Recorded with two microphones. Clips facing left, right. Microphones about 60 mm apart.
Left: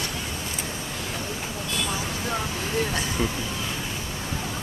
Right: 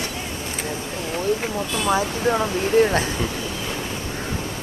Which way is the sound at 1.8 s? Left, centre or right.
Right.